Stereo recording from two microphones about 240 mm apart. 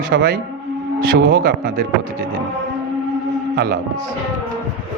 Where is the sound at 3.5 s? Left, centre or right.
Right.